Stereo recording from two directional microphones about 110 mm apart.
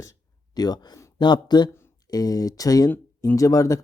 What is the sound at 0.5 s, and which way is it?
Speech, 35° left (ahead or behind).